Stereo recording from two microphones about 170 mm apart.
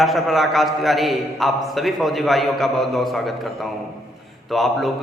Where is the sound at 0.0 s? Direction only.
Centre (ahead or behind).